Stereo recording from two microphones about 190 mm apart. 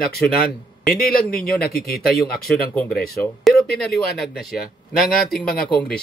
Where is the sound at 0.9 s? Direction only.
50° left (ahead or behind).